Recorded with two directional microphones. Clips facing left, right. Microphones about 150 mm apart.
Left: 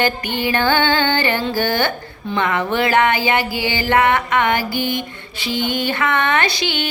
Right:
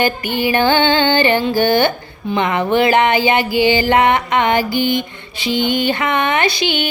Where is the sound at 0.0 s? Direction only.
10° right (ahead or behind).